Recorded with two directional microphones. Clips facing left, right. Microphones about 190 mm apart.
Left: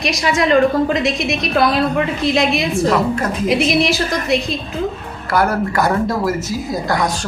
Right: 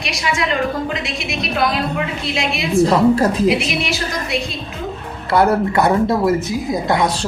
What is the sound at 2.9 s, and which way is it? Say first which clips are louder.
Speech: right 4 dB; 35° right (ahead or behind).